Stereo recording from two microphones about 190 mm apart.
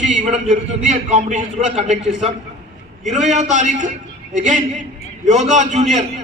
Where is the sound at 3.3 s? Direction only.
40° right (ahead or behind).